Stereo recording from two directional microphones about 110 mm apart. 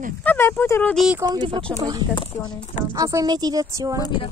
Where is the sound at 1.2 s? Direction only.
40° right (ahead or behind).